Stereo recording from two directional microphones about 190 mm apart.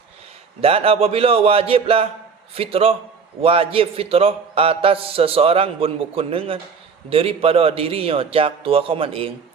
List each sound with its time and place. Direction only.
0.6 s a man's voice: 30° right (ahead or behind)